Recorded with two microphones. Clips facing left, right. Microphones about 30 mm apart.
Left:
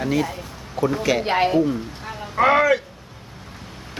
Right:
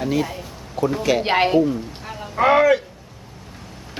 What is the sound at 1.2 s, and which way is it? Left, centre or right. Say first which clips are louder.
Speech: right 1 dB; right.